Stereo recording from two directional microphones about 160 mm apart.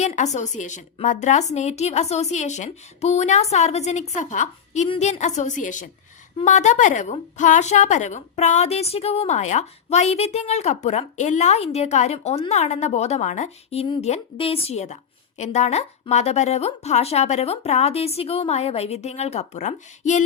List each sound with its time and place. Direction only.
0.0 s a woman's voice: 45° left (ahead or behind)